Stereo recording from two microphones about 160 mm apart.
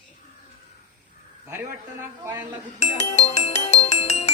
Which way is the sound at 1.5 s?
15° right (ahead or behind).